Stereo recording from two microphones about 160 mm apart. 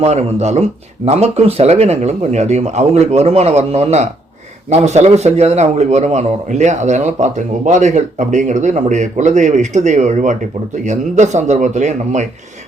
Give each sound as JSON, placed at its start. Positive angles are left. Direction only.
{"t": 0.0, "sound": "a man's voice", "side_deg": -45}